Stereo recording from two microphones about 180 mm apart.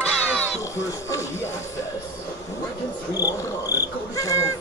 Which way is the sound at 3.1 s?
20° left (ahead or behind).